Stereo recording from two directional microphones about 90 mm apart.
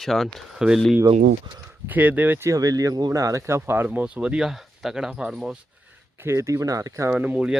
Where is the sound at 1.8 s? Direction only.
20° right (ahead or behind).